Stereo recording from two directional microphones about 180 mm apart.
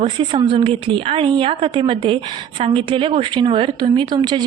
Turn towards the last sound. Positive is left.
turn(degrees=-25)  # may be behind; listen again after turning